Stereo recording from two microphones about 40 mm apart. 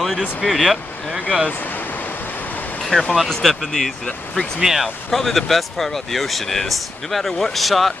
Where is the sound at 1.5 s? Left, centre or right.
Left.